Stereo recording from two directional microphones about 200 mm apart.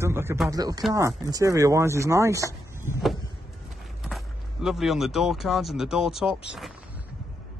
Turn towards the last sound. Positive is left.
turn(degrees=0)  # may be behind; listen again after turning